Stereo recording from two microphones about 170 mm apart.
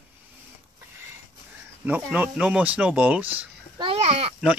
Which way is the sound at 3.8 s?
35° right (ahead or behind).